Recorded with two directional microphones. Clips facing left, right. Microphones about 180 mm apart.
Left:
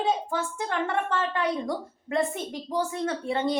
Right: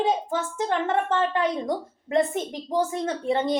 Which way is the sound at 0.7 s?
20° right (ahead or behind).